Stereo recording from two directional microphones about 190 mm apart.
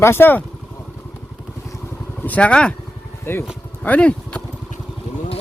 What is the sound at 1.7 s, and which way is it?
Vehicle, 10° left (ahead or behind).